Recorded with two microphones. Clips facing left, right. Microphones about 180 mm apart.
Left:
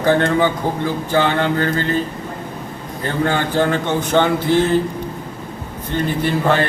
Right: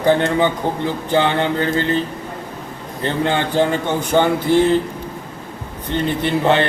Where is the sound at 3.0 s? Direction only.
20° right (ahead or behind).